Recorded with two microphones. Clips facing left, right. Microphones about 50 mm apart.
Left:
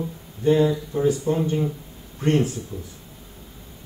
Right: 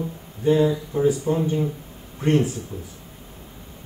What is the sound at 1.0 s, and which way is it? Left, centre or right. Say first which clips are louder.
Speech: right 1 dB; centre.